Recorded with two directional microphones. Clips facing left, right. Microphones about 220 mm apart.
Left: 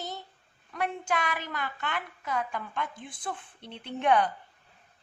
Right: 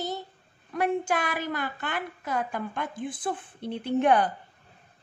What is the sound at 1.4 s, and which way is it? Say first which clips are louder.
A woman's voice: right 4 dB; 40° right (ahead or behind).